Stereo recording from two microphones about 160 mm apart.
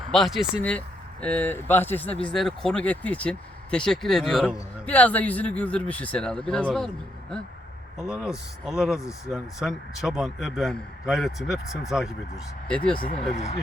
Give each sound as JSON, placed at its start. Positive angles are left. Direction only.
{"t": 0.1, "sound": "a man's voice", "side_deg": 0}
{"t": 13.1, "sound": "speech", "side_deg": 40}